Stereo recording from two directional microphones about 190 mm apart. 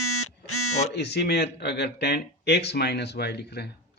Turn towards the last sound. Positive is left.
turn(degrees=60)  # may be behind; listen again after turning